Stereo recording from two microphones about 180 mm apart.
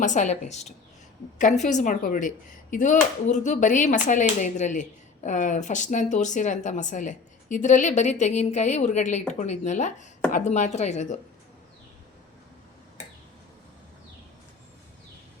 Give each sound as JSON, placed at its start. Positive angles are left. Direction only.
{"t": 0.0, "sound": "speech", "side_deg": 40}